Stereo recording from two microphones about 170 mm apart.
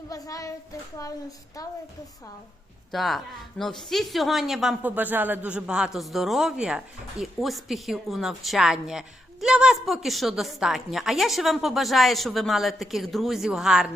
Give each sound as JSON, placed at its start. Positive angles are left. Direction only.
{"t": 0.1, "sound": "a child's voice", "side_deg": 20}
{"t": 1.6, "sound": "a child's voice", "side_deg": 20}
{"t": 2.9, "sound": "a woman's voice", "side_deg": 0}